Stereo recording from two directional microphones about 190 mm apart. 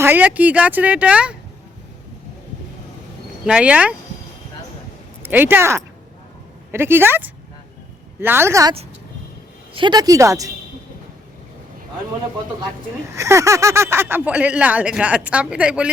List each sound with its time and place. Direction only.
0.0 s speech: 10° right (ahead or behind)
3.4 s speech: 5° right (ahead or behind)
5.2 s speech: 10° right (ahead or behind)
9.7 s a woman's voice: 25° right (ahead or behind)
13.1 s speech: 15° right (ahead or behind)